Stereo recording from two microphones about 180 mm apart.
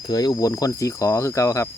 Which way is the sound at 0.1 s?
20° left (ahead or behind).